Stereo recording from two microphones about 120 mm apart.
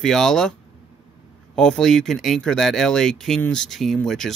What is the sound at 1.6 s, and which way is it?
Speech, 5° left (ahead or behind).